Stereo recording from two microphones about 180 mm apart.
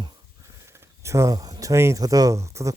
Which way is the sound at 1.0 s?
15° right (ahead or behind).